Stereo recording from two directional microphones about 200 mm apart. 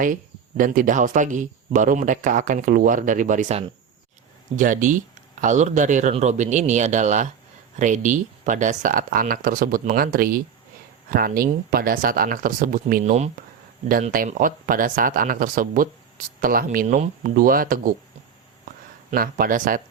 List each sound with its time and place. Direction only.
0.0 s speech: 40° right (ahead or behind)
19.1 s speech: 45° right (ahead or behind)